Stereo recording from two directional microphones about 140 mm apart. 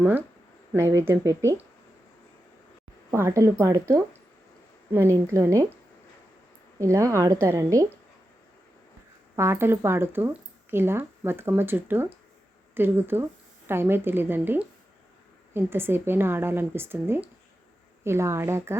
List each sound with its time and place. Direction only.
0.7 s a woman's voice: 20° right (ahead or behind)
3.1 s a woman's voice: 20° right (ahead or behind)
6.7 s a woman's voice: 20° right (ahead or behind)
9.3 s a woman's voice: 20° right (ahead or behind)